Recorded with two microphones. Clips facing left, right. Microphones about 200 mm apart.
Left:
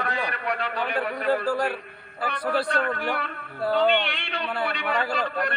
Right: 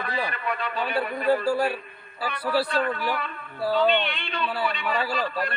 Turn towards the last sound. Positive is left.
turn(degrees=65)  # may be behind; listen again after turning